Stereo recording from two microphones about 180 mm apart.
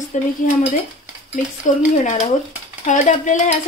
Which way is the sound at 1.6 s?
45° left (ahead or behind).